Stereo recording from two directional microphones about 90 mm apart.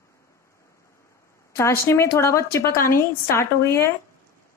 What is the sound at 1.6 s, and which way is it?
Speech, 30° left (ahead or behind).